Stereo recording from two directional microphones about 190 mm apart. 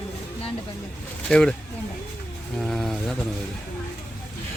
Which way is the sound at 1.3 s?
5° left (ahead or behind).